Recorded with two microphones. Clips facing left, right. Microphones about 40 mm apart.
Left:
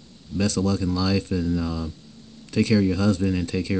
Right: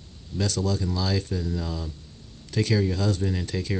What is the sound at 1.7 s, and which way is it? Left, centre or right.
Speech, centre.